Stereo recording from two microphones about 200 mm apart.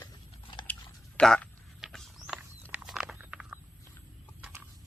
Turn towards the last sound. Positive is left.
turn(degrees=-5)  # may be behind; listen again after turning